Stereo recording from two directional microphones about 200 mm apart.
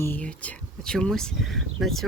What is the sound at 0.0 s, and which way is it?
Speech, 10° left (ahead or behind).